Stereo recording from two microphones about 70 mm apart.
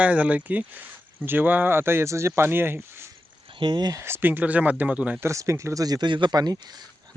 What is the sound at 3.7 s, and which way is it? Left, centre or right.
Speech, right.